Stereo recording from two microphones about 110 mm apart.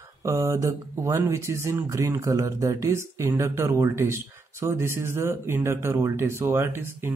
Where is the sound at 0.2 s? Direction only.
30° right (ahead or behind).